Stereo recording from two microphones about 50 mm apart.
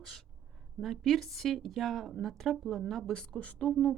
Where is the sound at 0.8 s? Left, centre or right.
Centre.